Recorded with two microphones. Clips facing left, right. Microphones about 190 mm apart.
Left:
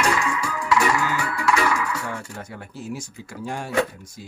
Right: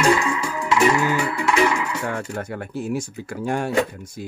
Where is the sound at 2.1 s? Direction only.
60° right (ahead or behind).